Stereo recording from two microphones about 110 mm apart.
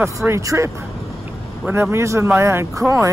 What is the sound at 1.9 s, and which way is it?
Speech, 25° right (ahead or behind).